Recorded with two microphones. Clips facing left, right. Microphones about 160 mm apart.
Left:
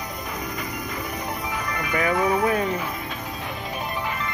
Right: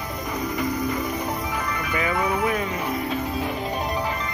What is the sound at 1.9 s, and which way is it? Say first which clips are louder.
Music: left 3 dB; 40° left (ahead or behind).